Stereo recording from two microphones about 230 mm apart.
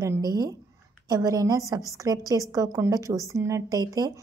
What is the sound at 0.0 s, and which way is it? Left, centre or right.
Speech, centre.